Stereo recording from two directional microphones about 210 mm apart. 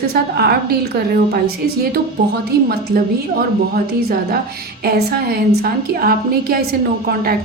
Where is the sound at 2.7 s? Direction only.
45° right (ahead or behind).